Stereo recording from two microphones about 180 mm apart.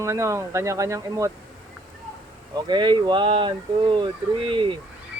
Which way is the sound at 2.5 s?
25° right (ahead or behind).